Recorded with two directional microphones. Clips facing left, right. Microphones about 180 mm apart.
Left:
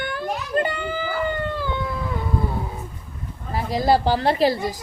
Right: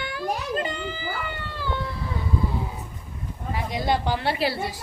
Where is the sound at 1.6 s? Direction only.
50° left (ahead or behind).